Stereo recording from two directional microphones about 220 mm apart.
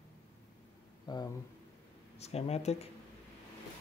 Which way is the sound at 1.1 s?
20° left (ahead or behind).